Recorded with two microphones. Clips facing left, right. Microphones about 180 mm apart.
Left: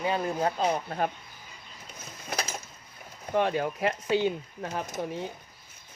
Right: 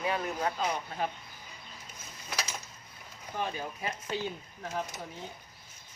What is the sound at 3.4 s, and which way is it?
Speech, 75° left (ahead or behind).